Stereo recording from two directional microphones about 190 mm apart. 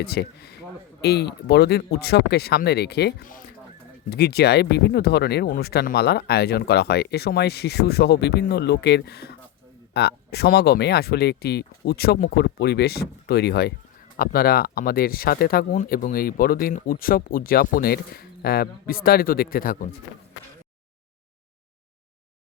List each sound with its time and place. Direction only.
0.0 s speech: 60° left (ahead or behind)